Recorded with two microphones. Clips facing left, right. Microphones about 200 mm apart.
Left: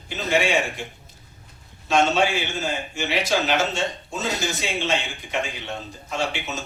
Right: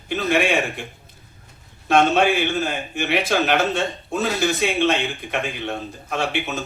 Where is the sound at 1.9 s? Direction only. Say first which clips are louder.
Right 3 dB; 60° right (ahead or behind).